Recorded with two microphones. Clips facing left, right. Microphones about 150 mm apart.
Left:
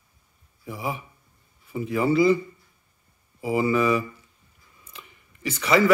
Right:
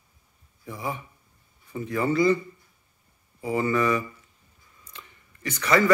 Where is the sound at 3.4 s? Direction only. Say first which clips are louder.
Left 2 dB; 10° left (ahead or behind).